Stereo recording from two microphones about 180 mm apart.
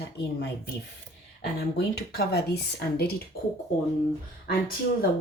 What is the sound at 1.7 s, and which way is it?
Speech, 65° left (ahead or behind).